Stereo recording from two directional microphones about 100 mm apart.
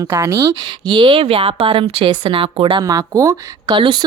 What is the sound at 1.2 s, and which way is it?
Speech, 65° right (ahead or behind).